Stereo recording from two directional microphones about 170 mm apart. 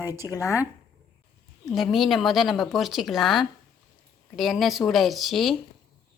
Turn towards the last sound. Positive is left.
turn(degrees=0)  # may be behind; listen again after turning